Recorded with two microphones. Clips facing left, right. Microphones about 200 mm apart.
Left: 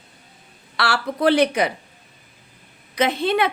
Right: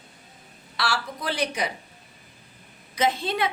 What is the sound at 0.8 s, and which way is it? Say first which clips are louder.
Speech: left 9 dB; 65° left (ahead or behind).